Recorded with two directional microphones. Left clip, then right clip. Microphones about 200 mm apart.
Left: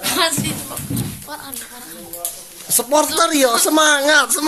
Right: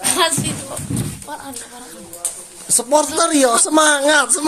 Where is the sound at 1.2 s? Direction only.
40° right (ahead or behind).